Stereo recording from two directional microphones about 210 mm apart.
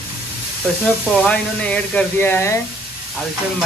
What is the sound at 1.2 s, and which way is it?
Speech, 5° left (ahead or behind).